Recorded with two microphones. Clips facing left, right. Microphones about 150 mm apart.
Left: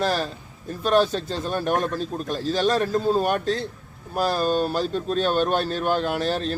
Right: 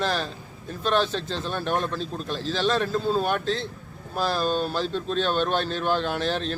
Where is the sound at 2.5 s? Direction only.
45° left (ahead or behind).